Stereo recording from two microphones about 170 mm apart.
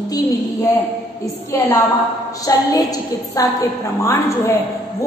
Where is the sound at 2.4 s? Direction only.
20° left (ahead or behind).